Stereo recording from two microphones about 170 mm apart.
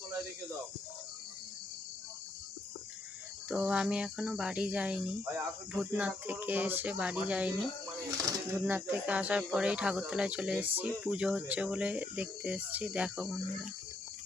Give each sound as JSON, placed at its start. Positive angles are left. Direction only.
{"t": 3.5, "sound": "speech", "side_deg": -5}
{"t": 8.6, "sound": "speech", "side_deg": -10}